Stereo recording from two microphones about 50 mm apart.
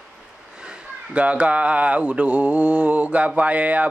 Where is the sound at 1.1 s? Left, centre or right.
Right.